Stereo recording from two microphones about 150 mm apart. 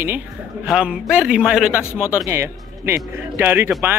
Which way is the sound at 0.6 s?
5° right (ahead or behind).